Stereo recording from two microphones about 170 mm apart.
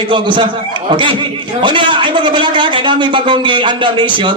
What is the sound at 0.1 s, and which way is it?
A man's voice, 30° right (ahead or behind).